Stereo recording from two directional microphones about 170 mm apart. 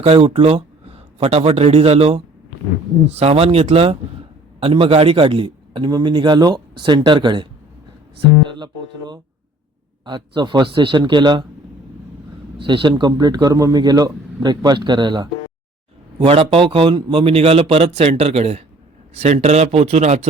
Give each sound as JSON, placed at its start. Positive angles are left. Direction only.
{"t": 0.0, "sound": "a man's voice", "side_deg": -35}
{"t": 8.5, "sound": "a man's voice", "side_deg": -25}
{"t": 12.6, "sound": "a man's voice", "side_deg": -30}